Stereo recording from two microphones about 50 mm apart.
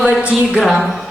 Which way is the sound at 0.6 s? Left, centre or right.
Centre.